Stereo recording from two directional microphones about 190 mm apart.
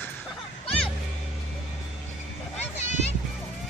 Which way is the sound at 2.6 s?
35° left (ahead or behind).